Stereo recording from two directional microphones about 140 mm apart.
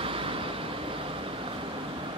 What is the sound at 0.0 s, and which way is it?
Vehicle, 40° right (ahead or behind).